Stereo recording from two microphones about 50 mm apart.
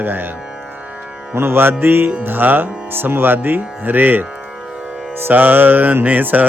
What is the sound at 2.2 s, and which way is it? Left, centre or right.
Mantra, right.